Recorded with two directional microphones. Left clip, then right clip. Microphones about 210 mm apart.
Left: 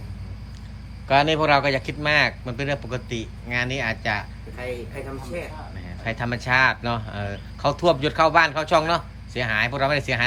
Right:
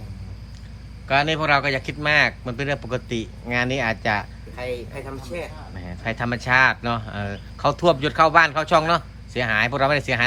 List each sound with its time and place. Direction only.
1.0 s speech: 5° left (ahead or behind)
4.5 s speech: 20° right (ahead or behind)
5.7 s speech: centre (ahead or behind)